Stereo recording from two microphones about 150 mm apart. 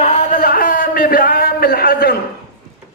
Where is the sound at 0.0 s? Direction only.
50° left (ahead or behind); by 2.1 s 85° left.